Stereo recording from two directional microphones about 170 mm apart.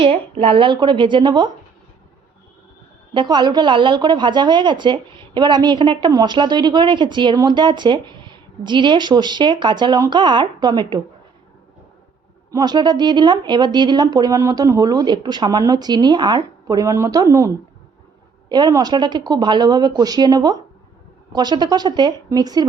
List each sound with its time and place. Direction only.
0.0 s a woman's voice: 35° right (ahead or behind)
3.2 s a woman's voice: 25° right (ahead or behind)
12.5 s a woman's voice: 25° right (ahead or behind)